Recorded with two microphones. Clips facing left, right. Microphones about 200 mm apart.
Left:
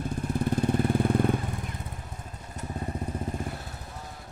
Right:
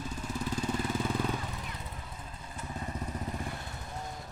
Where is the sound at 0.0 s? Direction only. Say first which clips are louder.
Left 7 dB; 55° left (ahead or behind).